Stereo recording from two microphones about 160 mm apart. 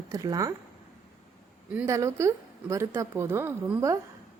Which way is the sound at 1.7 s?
15° right (ahead or behind).